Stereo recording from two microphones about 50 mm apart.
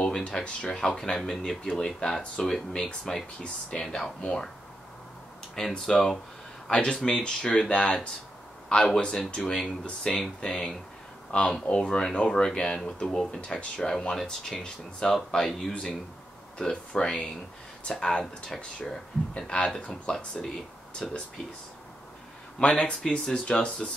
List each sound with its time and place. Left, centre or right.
0.0 s speech: centre
5.6 s speech: centre
6.7 s speech: centre
21.0 s speech: centre
22.8 s speech: centre